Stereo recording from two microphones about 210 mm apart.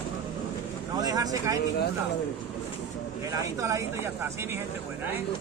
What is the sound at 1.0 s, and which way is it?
Vehicle, 15° right (ahead or behind).